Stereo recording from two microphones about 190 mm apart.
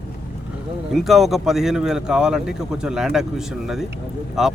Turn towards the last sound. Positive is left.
turn(degrees=-5)  # may be behind; listen again after turning